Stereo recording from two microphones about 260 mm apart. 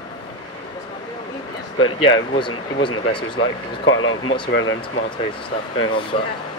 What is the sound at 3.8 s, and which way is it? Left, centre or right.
Speech, left.